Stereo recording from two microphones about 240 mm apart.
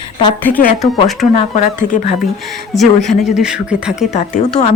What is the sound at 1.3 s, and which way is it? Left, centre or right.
Speech, left.